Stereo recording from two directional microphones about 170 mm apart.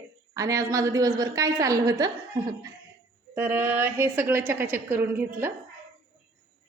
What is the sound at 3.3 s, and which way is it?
A woman's voice, 15° right (ahead or behind).